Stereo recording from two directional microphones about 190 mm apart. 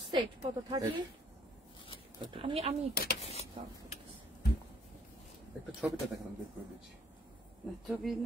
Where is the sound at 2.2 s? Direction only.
30° right (ahead or behind).